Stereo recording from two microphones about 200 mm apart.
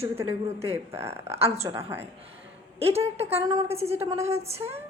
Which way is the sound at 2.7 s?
30° right (ahead or behind).